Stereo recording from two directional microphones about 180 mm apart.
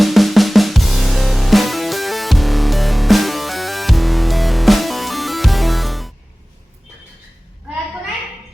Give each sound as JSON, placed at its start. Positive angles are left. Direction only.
{"t": 0.0, "sound": "drum", "side_deg": 0}